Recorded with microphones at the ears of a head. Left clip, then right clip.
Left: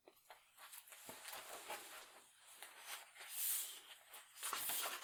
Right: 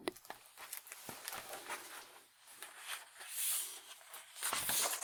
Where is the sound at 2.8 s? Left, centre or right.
Right.